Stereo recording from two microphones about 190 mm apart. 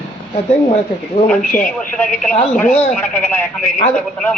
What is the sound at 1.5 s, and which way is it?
Speech, 45° left (ahead or behind).